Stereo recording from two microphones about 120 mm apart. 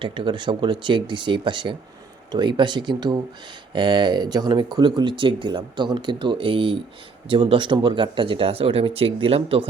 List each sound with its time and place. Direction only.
0.0 s speech: 45° right (ahead or behind)